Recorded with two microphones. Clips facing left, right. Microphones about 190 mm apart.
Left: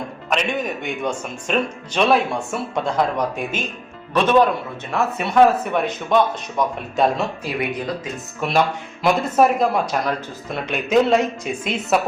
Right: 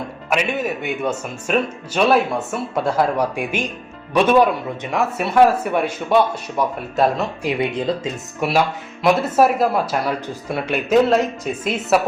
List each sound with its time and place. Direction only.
0.3 s a man's voice: 5° right (ahead or behind)
7.6 s speech: 25° right (ahead or behind)
8.4 s speech: 5° right (ahead or behind)